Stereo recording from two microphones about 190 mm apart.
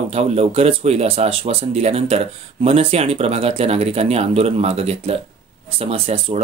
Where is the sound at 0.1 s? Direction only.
35° right (ahead or behind).